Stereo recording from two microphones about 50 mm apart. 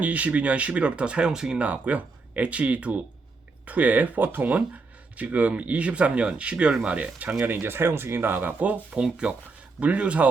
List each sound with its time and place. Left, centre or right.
0.0 s speech: right; by 1.5 s centre
1.5 s speech: right